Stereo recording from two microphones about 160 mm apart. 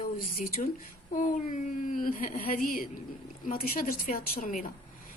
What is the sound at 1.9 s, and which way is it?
A woman's voice, 60° left (ahead or behind).